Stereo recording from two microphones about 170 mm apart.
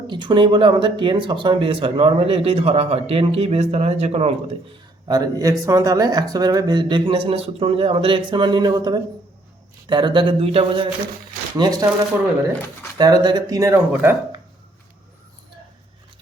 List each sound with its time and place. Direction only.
0.1 s speech: 30° right (ahead or behind)
5.0 s speech: 20° right (ahead or behind)
13.0 s speech: 25° right (ahead or behind)